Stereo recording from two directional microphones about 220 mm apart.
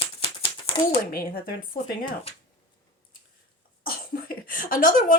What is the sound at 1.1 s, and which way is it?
A woman's voice, 40° left (ahead or behind).